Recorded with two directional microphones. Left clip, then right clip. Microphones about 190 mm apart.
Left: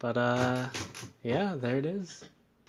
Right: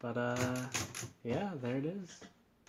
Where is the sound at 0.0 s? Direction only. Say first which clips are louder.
Left 8 dB; 35° left (ahead or behind).